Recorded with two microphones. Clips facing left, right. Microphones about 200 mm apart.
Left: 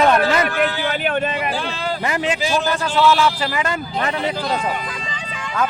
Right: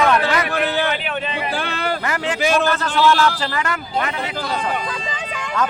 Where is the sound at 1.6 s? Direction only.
65° right (ahead or behind).